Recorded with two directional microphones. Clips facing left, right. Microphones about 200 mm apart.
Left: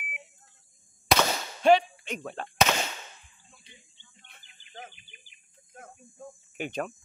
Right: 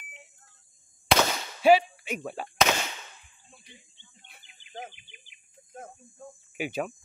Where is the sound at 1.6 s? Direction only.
5° right (ahead or behind).